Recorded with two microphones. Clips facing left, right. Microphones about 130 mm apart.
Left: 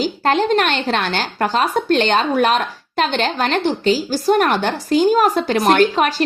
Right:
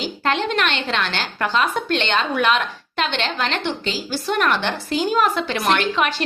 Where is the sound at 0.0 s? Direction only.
40° left (ahead or behind).